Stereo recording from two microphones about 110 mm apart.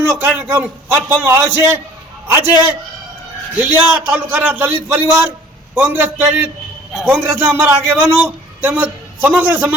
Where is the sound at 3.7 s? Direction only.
15° right (ahead or behind).